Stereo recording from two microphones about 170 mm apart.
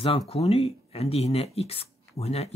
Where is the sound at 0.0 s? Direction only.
35° left (ahead or behind).